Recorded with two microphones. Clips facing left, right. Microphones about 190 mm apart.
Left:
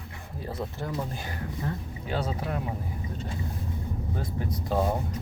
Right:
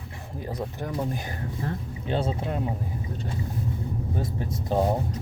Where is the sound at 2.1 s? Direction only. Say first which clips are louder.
Right 3 dB; 25° right (ahead or behind).